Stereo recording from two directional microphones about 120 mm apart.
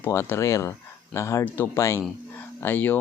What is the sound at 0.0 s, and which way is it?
Speech, 20° left (ahead or behind).